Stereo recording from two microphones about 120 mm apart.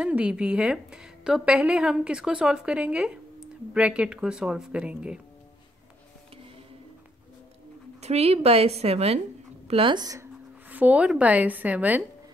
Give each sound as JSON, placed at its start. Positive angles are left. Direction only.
{"t": 0.0, "sound": "a woman's voice", "side_deg": -10}
{"t": 8.0, "sound": "a woman's voice", "side_deg": -60}
{"t": 9.7, "sound": "speech", "side_deg": -45}
{"t": 10.7, "sound": "a woman's voice", "side_deg": -10}